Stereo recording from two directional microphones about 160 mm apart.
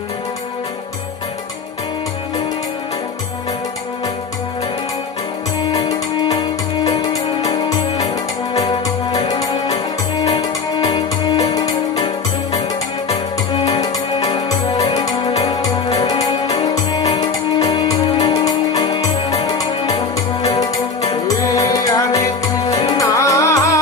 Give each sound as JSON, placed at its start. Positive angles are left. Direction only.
{"t": 5.6, "sound": "music", "side_deg": 25}
{"t": 8.5, "sound": "music", "side_deg": 25}
{"t": 13.1, "sound": "music", "side_deg": 35}
{"t": 16.0, "sound": "music", "side_deg": 25}
{"t": 21.2, "sound": "music", "side_deg": 20}
{"t": 22.7, "sound": "music", "side_deg": 35}
{"t": 23.0, "sound": "music", "side_deg": 20}